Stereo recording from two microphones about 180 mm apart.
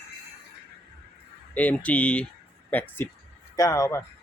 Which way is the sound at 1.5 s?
10° left (ahead or behind).